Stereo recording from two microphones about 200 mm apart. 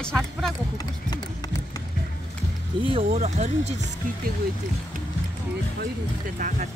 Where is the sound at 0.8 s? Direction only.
20° left (ahead or behind).